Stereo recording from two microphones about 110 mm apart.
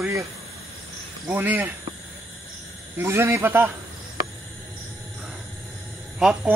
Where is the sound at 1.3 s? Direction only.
15° right (ahead or behind).